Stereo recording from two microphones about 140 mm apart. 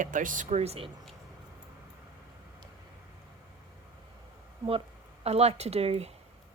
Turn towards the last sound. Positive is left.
turn(degrees=-45)  # may be behind; listen again after turning